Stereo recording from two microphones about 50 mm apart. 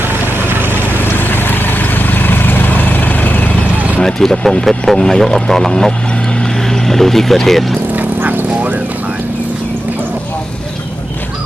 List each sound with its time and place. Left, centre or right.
0.5 s boat: right
1.1 s vehicle: left
4.0 s speech: centre
6.4 s vehicle: centre
7.9 s vehicle: right